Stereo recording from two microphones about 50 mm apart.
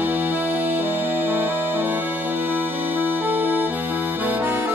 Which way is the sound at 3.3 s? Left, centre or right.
Right.